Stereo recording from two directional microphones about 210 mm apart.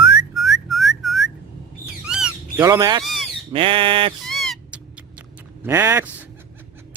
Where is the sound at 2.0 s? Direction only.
5° right (ahead or behind).